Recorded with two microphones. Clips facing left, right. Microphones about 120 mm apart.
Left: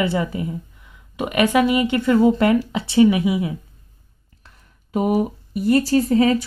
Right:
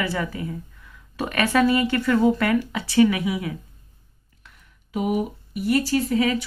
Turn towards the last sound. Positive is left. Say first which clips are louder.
# left 5 dB
turn(degrees=35)  # may be behind; listen again after turning